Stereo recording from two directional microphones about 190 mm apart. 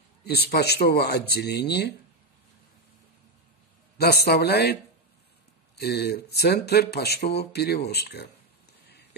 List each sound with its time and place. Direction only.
0.2 s speech: 60° left (ahead or behind)
4.0 s speech: 55° left (ahead or behind)
5.8 s speech: 55° left (ahead or behind)